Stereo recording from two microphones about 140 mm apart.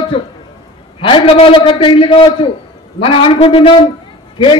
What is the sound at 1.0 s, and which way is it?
A man's voice, 40° left (ahead or behind).